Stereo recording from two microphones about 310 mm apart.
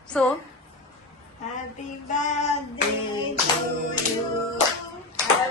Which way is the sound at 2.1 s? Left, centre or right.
Left.